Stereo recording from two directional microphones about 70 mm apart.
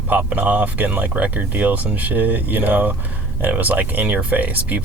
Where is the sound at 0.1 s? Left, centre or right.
Right.